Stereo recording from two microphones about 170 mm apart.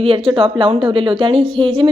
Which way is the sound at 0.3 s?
30° right (ahead or behind).